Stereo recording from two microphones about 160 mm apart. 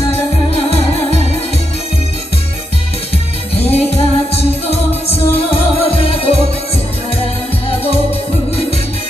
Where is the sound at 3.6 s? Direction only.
40° left (ahead or behind).